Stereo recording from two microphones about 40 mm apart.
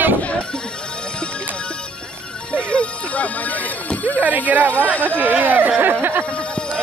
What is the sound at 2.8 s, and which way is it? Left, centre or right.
Music, left.